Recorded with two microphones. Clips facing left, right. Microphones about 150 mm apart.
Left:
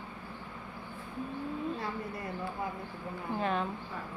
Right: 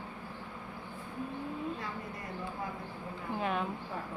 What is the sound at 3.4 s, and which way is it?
Speech, 5° right (ahead or behind).